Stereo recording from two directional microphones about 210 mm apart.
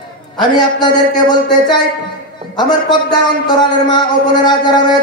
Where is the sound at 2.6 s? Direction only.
20° left (ahead or behind).